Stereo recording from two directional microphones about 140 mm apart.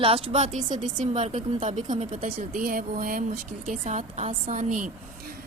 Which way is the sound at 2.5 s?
85° right.